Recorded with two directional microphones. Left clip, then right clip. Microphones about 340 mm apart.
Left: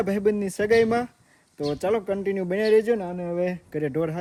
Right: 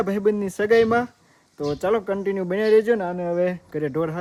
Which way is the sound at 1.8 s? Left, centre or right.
Centre.